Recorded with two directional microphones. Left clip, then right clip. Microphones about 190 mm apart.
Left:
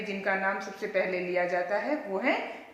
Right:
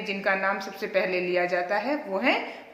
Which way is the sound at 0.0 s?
40° right (ahead or behind).